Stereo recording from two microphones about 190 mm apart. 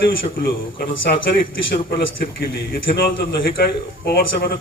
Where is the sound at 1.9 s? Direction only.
50° left (ahead or behind).